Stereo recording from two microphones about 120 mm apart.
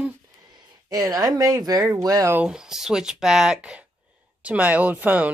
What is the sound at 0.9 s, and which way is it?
Speech, 30° right (ahead or behind).